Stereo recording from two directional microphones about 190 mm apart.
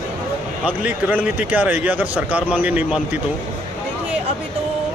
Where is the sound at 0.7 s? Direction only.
10° right (ahead or behind).